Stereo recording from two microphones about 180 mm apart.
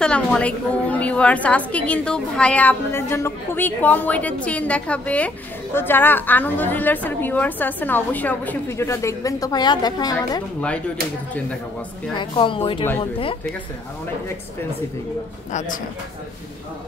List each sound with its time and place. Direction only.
0.0 s a woman's voice: 5° left (ahead or behind); by 10.4 s 20° left (ahead or behind)
12.2 s speech: 25° left (ahead or behind)